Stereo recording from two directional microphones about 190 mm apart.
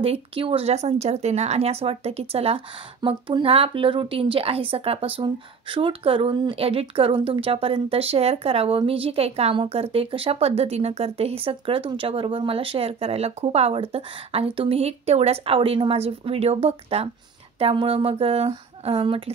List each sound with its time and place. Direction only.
0.0 s speech: 30° right (ahead or behind)